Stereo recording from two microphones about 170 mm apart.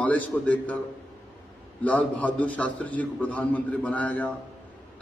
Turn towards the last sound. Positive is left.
turn(degrees=10)  # may be behind; listen again after turning